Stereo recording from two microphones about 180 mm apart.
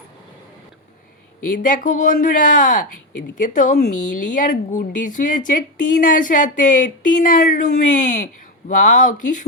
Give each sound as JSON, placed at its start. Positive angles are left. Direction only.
{"t": 1.5, "sound": "speech", "side_deg": 45}